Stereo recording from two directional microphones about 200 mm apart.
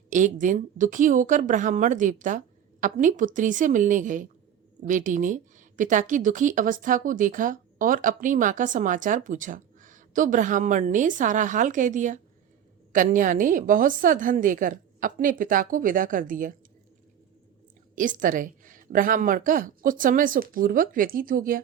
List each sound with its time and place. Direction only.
0.1 s a woman's voice: 40° right (ahead or behind)
17.9 s speech: 40° right (ahead or behind)